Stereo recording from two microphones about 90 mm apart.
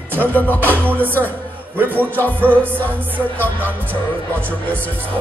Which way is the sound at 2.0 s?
20° left (ahead or behind).